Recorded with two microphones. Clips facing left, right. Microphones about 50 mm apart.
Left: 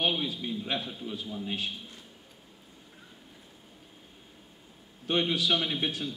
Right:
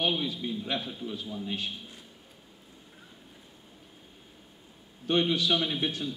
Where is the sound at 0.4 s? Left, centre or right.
Centre.